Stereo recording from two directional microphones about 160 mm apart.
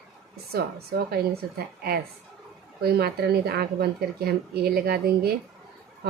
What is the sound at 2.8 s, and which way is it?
Speech, 80° right.